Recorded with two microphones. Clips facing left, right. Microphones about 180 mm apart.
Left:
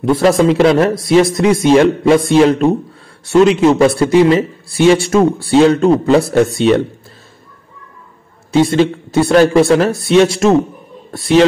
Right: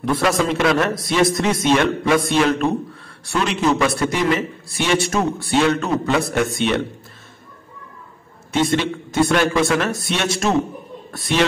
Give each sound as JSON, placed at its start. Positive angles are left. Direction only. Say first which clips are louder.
{"t": 0.0, "sound": "a man's voice", "louder": "left 8 dB", "side_deg": 25}
{"t": 8.7, "sound": "a man's voice", "louder": "left 6 dB", "side_deg": 35}